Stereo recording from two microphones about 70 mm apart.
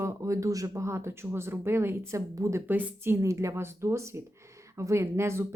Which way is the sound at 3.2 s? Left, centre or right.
Right.